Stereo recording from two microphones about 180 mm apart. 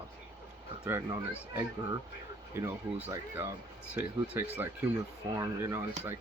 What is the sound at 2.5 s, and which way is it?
Speech, 15° right (ahead or behind).